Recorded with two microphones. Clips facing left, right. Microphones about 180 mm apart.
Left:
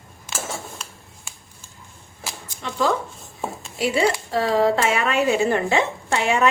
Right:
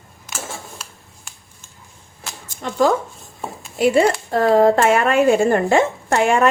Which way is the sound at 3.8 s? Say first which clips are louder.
Right 6 dB; 50° right (ahead or behind).